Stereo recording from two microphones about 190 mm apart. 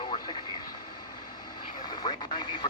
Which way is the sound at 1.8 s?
20° left (ahead or behind).